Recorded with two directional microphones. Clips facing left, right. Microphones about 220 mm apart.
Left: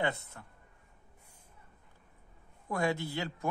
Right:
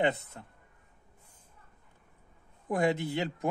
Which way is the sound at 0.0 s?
20° right (ahead or behind).